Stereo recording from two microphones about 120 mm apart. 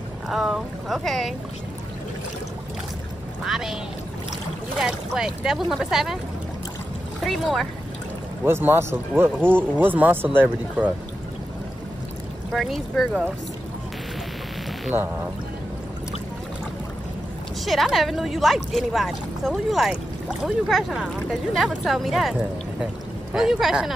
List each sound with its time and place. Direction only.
0.3 s speech: centre (ahead or behind)
3.4 s speech: 5° right (ahead or behind)
7.2 s speech: centre (ahead or behind)
8.5 s speech: 20° right (ahead or behind)
12.5 s speech: centre (ahead or behind)
14.9 s speech: 15° right (ahead or behind)
17.6 s speech: centre (ahead or behind)